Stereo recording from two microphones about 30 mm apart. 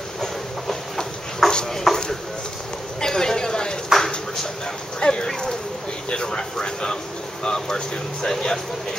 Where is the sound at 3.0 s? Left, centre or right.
Left.